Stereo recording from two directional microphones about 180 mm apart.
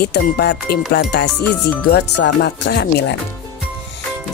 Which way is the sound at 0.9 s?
65° left (ahead or behind).